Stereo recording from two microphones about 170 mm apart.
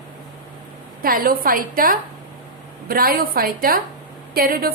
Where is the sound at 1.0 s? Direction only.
55° right (ahead or behind).